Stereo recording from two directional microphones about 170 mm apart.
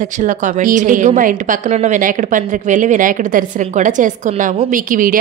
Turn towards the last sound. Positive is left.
turn(degrees=-55)  # may be behind; listen again after turning